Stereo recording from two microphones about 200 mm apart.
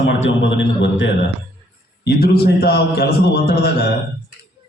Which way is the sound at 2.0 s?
55° left (ahead or behind).